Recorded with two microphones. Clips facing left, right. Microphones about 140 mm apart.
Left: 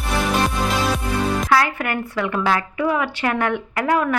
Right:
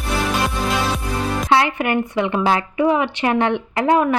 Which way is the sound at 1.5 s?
25° right (ahead or behind).